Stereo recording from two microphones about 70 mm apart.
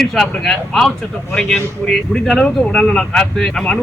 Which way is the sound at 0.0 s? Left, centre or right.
Centre.